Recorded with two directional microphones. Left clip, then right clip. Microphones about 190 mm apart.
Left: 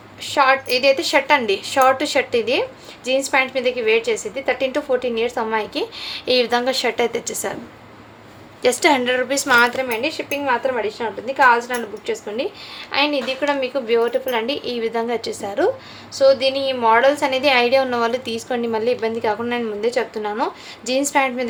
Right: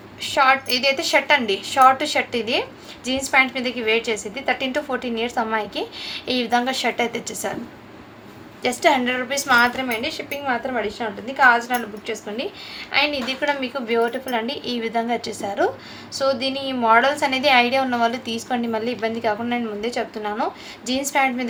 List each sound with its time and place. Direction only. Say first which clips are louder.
0.2 s a woman's voice: left 1 dB; 20° left (ahead or behind)
8.6 s a woman's voice: left 2 dB; 25° left (ahead or behind)